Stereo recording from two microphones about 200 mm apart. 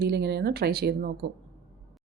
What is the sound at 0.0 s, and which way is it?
Speech, 55° right (ahead or behind).